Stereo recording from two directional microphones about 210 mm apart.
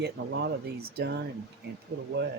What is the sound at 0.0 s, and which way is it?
Speech, 50° right (ahead or behind).